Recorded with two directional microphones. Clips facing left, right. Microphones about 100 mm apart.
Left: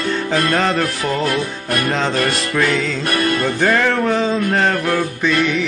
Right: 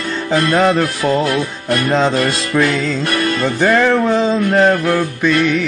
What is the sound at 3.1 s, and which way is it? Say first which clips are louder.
Music: left 2 dB; 40° left (ahead or behind).